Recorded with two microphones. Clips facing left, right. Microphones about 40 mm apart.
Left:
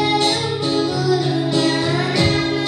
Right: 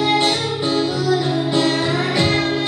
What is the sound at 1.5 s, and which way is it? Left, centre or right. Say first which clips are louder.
Music: right 1 dB; right.